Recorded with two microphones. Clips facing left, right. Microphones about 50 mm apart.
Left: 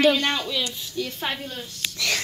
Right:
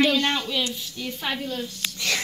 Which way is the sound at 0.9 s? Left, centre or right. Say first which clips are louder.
Left 3 dB; right.